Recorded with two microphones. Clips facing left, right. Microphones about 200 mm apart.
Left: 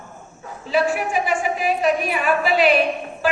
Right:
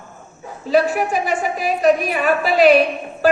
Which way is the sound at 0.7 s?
40° right (ahead or behind).